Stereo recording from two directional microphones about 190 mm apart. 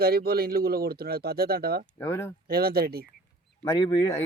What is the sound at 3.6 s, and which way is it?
Speech, 20° left (ahead or behind).